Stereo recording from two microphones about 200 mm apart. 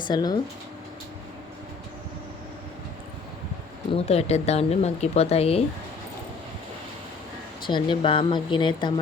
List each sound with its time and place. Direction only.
0.1 s speech: 20° left (ahead or behind)
3.9 s speech: 30° left (ahead or behind)
7.7 s speech: 25° left (ahead or behind)